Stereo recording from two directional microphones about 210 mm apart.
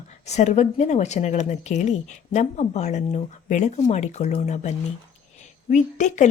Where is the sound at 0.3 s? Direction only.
35° left (ahead or behind).